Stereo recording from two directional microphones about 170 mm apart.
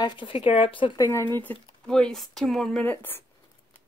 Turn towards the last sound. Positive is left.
turn(degrees=10)  # may be behind; listen again after turning